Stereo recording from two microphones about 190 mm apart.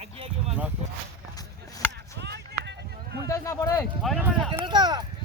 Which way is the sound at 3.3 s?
15° left (ahead or behind).